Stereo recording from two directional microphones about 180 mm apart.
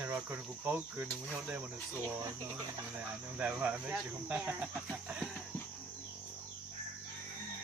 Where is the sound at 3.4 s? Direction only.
10° right (ahead or behind).